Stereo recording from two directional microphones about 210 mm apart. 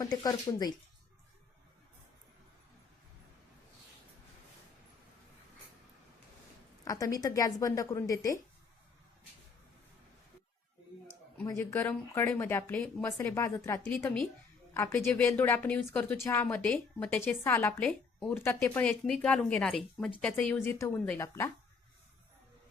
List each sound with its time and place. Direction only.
0.0 s speech: 20° left (ahead or behind)
6.8 s a woman's voice: 15° left (ahead or behind)
11.4 s a woman's voice: 15° left (ahead or behind)